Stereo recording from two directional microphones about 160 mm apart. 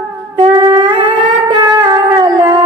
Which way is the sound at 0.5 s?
25° right (ahead or behind).